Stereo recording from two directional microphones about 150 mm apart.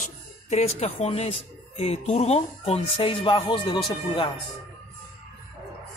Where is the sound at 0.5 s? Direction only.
45° left (ahead or behind).